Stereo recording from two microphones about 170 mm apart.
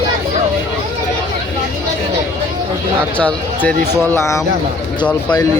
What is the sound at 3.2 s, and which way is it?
Speech, 5° left (ahead or behind).